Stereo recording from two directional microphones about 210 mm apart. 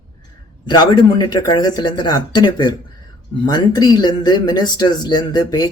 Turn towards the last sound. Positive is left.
turn(degrees=20)  # may be behind; listen again after turning